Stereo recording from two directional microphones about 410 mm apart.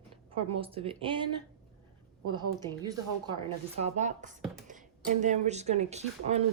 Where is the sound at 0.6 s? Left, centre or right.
Centre.